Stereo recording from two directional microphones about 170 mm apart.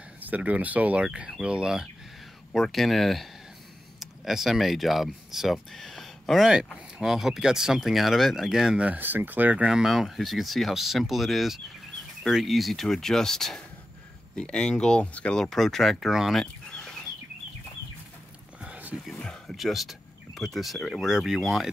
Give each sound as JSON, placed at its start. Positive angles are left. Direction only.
{"t": 0.2, "sound": "speech", "side_deg": -10}
{"t": 18.6, "sound": "a sound", "side_deg": -5}
{"t": 19.1, "sound": "speech", "side_deg": 5}